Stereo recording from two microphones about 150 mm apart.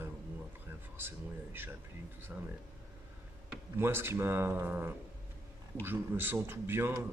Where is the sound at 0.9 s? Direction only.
15° right (ahead or behind).